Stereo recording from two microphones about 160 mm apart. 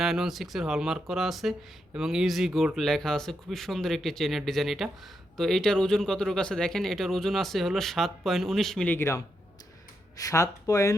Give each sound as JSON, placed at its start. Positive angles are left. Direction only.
{"t": 0.0, "sound": "speech", "side_deg": 0}